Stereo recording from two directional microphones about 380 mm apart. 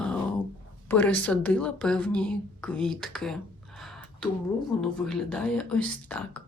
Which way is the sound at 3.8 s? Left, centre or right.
Centre.